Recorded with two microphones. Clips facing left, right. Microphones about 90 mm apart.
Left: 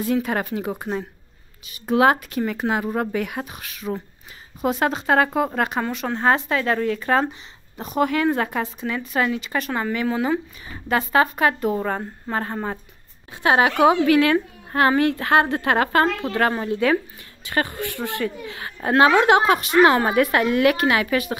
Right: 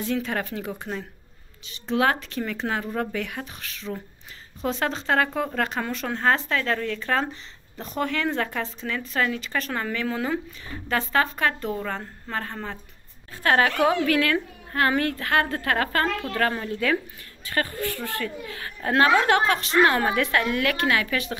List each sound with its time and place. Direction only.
0.0 s a woman's voice: 15° left (ahead or behind)
2.9 s a woman's voice: 25° left (ahead or behind)
13.4 s a woman's voice: 15° left (ahead or behind)